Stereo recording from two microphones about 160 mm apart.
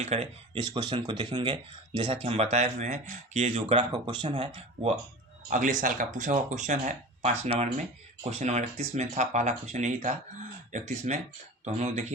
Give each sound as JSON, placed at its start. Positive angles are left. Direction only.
{"t": 0.0, "sound": "speech", "side_deg": -40}
{"t": 0.5, "sound": "speech", "side_deg": -30}
{"t": 5.5, "sound": "speech", "side_deg": -50}